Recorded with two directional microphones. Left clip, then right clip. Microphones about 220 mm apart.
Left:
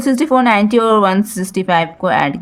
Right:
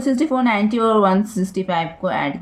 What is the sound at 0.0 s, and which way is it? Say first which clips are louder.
A woman's voice: left 6 dB; 45° left (ahead or behind).